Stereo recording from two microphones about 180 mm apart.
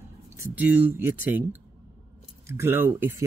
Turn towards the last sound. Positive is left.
turn(degrees=-10)  # may be behind; listen again after turning